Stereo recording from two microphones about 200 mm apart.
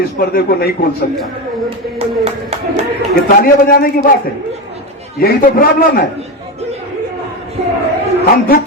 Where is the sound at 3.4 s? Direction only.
45° left (ahead or behind).